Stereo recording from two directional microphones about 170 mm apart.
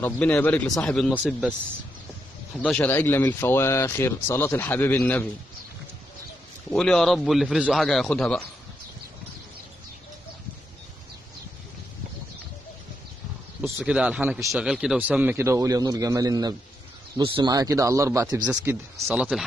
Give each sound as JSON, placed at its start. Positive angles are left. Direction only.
{"t": 0.0, "sound": "speech", "side_deg": 10}
{"t": 1.1, "sound": "speech", "side_deg": -5}
{"t": 2.6, "sound": "speech", "side_deg": 10}
{"t": 6.7, "sound": "a man's voice", "side_deg": 5}
{"t": 13.6, "sound": "a man's voice", "side_deg": -5}
{"t": 18.4, "sound": "speech", "side_deg": -10}